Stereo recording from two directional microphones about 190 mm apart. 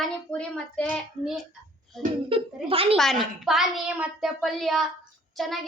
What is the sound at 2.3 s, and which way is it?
Speech, 30° right (ahead or behind).